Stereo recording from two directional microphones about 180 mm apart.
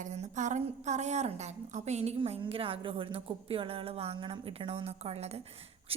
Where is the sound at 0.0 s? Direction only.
40° right (ahead or behind).